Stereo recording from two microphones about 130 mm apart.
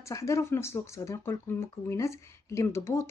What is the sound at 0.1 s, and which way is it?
Speech, 25° left (ahead or behind).